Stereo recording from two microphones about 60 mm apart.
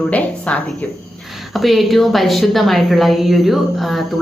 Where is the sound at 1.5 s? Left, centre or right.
Centre.